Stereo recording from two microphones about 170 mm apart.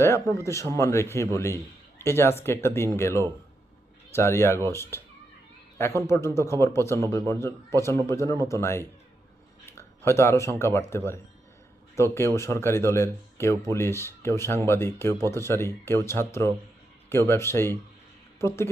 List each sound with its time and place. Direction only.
0.0 s speech: 15° left (ahead or behind)
9.6 s a sound: 15° left (ahead or behind)
10.6 s speech: 15° left (ahead or behind)